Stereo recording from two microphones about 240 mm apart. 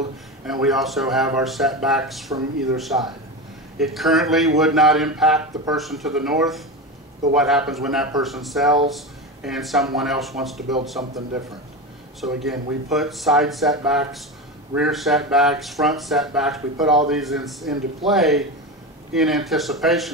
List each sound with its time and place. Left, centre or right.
0.5 s speech: centre